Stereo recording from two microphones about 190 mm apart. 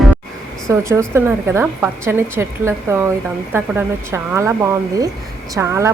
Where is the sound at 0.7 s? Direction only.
15° right (ahead or behind).